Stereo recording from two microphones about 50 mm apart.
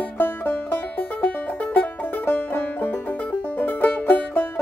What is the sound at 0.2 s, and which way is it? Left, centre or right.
Music, left.